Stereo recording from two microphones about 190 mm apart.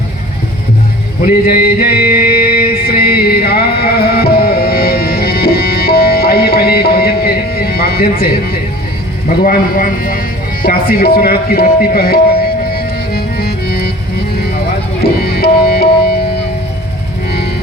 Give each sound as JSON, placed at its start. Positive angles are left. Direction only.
{"t": 1.3, "sound": "music", "side_deg": 50}
{"t": 2.0, "sound": "music", "side_deg": -10}
{"t": 2.5, "sound": "music", "side_deg": 55}
{"t": 9.4, "sound": "music", "side_deg": 45}